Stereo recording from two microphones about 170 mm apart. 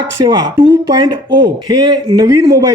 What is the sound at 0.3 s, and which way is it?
Speech, 25° right (ahead or behind).